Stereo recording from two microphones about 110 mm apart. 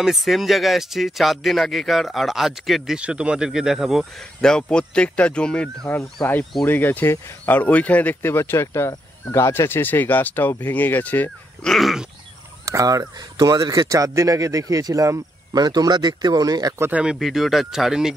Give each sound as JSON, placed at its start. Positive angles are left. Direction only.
{"t": 0.0, "sound": "speech", "side_deg": 0}
{"t": 11.7, "sound": "speech", "side_deg": 0}
{"t": 12.6, "sound": "speech", "side_deg": -30}
{"t": 16.9, "sound": "speech", "side_deg": -5}